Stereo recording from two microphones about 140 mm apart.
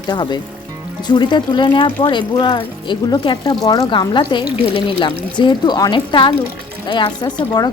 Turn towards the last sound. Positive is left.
turn(degrees=30)  # may be behind; listen again after turning